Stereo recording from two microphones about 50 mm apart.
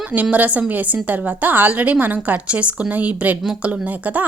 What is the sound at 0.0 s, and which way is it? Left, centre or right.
A woman's voice, right.